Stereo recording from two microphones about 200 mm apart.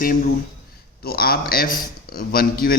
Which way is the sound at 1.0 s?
50° left (ahead or behind).